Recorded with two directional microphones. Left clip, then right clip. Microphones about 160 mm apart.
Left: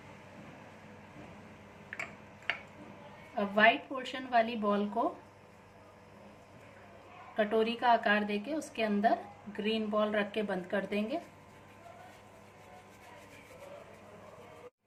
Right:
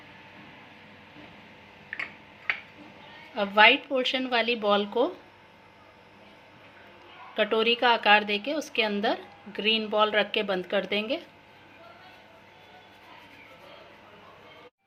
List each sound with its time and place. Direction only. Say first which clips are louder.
3.3 s a woman's voice: right 7 dB; 45° right (ahead or behind)
7.3 s a woman's voice: right 7 dB; 45° right (ahead or behind)